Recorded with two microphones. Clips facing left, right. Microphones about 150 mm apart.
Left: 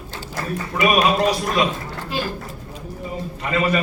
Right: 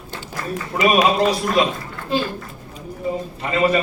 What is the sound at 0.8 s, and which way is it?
Speech, 30° right (ahead or behind).